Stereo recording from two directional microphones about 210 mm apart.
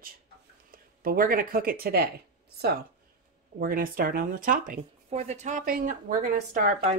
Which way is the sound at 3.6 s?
40° right (ahead or behind).